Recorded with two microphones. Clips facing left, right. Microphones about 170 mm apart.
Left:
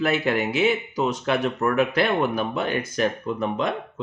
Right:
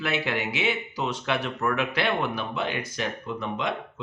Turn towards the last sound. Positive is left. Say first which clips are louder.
# left 5 dB
turn(degrees=45)  # may be behind; listen again after turning